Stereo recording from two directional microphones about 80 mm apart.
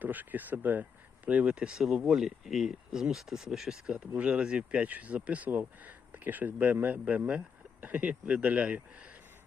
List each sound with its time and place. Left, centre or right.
0.0 s speech: right